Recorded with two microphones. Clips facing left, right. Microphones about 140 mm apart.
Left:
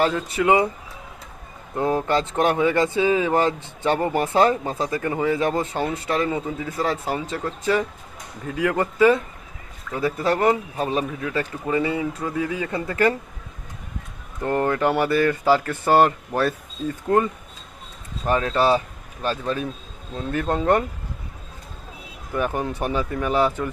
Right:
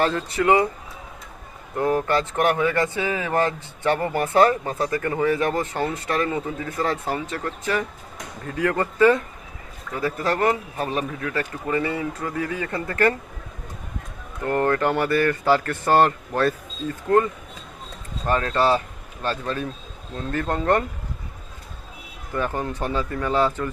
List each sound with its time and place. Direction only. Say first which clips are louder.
0.0 s speech: left 1 dB; 15° left (ahead or behind)
1.7 s speech: even; 20° left (ahead or behind)
14.4 s speech: even; 15° left (ahead or behind)
18.3 s speech: left 1 dB; 15° left (ahead or behind)
22.3 s speech: left 2 dB; 15° left (ahead or behind)